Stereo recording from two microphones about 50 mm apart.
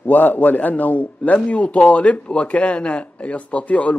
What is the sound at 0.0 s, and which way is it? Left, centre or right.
A man's voice, left.